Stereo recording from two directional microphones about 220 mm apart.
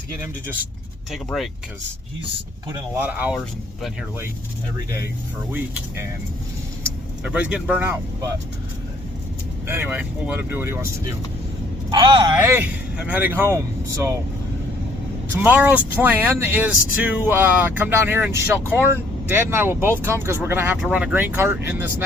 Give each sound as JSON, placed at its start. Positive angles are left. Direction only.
{"t": 1.1, "sound": "speech", "side_deg": 0}
{"t": 3.0, "sound": "speech", "side_deg": -5}
{"t": 5.5, "sound": "speech", "side_deg": -10}
{"t": 7.3, "sound": "speech", "side_deg": -5}
{"t": 9.6, "sound": "speech", "side_deg": -10}
{"t": 11.9, "sound": "speech", "side_deg": -20}
{"t": 12.4, "sound": "speech", "side_deg": -10}
{"t": 15.4, "sound": "speech", "side_deg": -5}